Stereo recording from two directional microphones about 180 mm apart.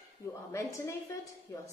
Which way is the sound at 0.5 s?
15° left (ahead or behind).